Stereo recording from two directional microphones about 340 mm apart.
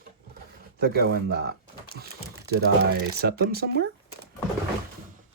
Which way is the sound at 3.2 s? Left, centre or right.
Right.